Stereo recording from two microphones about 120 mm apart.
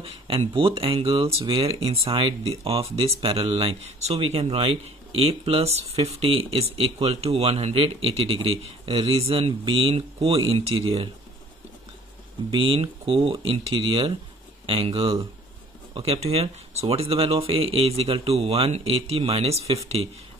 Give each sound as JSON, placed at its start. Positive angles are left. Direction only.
{"t": 0.0, "sound": "speech", "side_deg": -45}
{"t": 12.4, "sound": "speech", "side_deg": -50}